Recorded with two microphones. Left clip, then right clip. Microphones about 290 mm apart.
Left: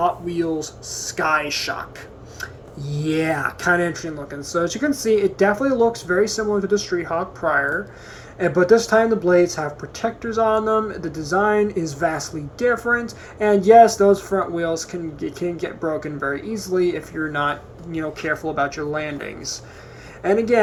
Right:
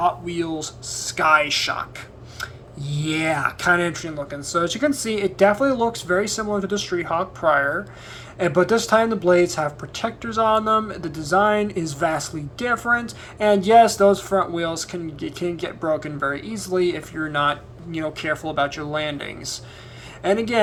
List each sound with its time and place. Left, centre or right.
0.0 s speech: right
1.5 s speech: centre
2.8 s speech: centre
11.3 s speech: centre
11.6 s speech: right